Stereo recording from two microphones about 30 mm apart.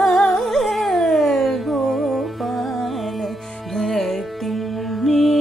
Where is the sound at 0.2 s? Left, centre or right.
Centre.